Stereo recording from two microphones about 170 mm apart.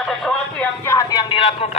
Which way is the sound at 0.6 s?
15° left (ahead or behind).